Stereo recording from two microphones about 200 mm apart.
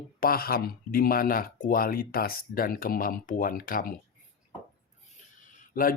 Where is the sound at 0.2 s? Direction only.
50° left (ahead or behind).